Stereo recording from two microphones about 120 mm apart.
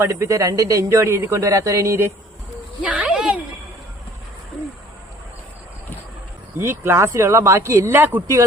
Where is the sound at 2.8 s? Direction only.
10° right (ahead or behind).